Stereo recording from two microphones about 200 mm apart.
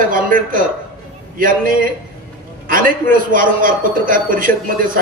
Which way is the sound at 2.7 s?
45° right (ahead or behind).